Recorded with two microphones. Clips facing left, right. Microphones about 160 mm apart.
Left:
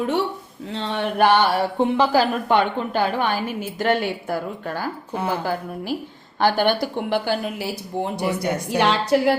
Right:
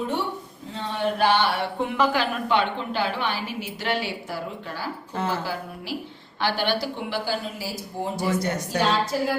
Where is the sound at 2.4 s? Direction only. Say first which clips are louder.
Left 4 dB; 50° left (ahead or behind).